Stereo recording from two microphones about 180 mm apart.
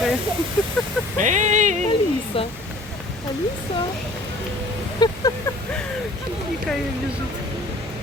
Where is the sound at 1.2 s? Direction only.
45° right (ahead or behind).